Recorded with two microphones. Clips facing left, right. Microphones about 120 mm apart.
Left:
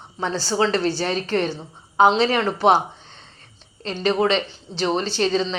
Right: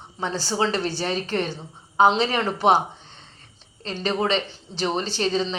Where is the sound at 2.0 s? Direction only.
15° right (ahead or behind).